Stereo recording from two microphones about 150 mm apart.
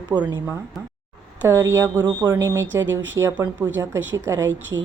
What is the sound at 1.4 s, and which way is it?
Speech, 20° right (ahead or behind).